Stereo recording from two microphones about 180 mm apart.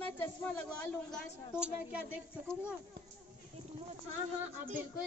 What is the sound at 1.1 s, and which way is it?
A woman's voice, 5° right (ahead or behind).